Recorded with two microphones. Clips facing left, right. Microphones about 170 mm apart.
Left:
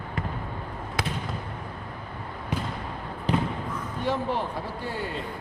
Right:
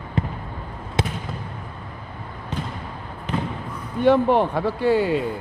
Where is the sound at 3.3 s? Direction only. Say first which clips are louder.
Left 1 dB; 35° left (ahead or behind).